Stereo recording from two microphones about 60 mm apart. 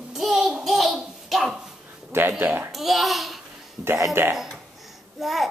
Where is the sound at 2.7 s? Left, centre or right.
Centre.